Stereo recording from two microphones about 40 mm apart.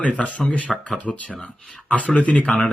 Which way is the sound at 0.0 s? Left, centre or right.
Left.